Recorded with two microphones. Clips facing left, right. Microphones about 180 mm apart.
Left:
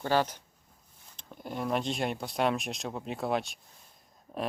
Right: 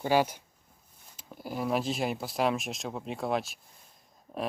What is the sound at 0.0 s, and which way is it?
Speech, 10° right (ahead or behind).